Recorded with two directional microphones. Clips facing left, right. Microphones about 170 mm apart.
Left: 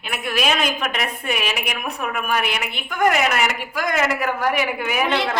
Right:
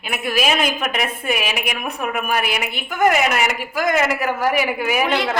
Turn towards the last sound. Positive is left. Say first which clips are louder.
# right 2 dB
turn(degrees=-5)  # may be behind; listen again after turning